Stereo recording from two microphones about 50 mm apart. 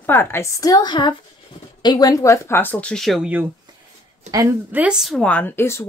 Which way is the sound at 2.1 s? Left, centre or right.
Left.